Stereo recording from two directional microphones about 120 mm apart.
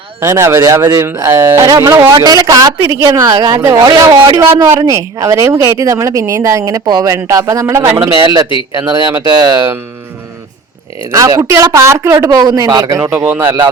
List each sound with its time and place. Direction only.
0.2 s speech: 25° right (ahead or behind)
11.1 s speech: 25° right (ahead or behind)
13.1 s speech: 15° right (ahead or behind)